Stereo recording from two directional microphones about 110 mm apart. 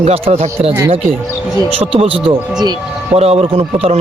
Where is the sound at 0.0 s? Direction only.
65° right (ahead or behind).